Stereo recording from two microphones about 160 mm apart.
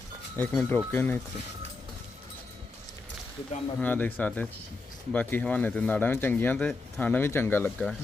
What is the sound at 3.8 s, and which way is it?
Speech, 10° left (ahead or behind).